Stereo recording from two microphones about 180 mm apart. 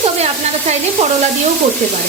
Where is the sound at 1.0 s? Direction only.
35° right (ahead or behind).